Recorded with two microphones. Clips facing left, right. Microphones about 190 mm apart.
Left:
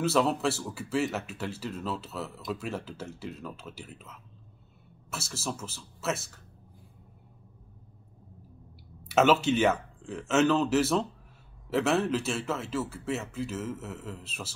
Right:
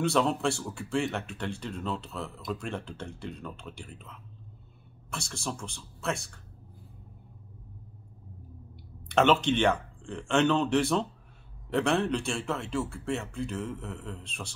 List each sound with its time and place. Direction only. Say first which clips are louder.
0.0 s speech: even; centre (ahead or behind)
9.1 s speech: left 1 dB; 5° left (ahead or behind)